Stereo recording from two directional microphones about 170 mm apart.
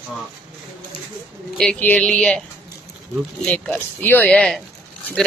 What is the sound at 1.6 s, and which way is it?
Speech, 5° left (ahead or behind).